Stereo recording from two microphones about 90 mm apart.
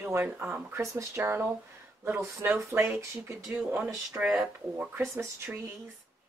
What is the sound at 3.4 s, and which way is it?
Speech, 10° right (ahead or behind).